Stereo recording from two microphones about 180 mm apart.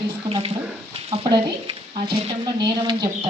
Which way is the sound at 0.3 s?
30° right (ahead or behind).